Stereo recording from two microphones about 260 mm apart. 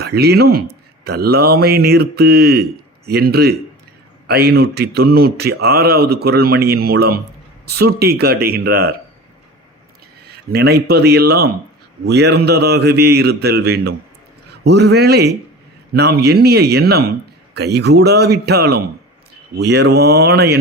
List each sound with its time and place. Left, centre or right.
0.0 s speech: right
10.3 s speech: right